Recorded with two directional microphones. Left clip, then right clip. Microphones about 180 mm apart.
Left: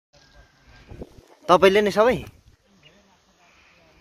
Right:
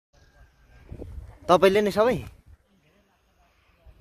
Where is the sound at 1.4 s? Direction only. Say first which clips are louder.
Left 3 dB; 10° right (ahead or behind).